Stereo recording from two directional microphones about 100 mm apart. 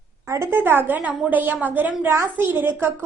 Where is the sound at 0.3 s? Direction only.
25° right (ahead or behind).